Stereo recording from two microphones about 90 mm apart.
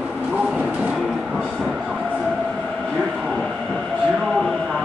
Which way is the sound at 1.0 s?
5° right (ahead or behind).